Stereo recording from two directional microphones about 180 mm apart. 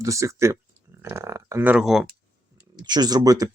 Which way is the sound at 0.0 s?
15° right (ahead or behind).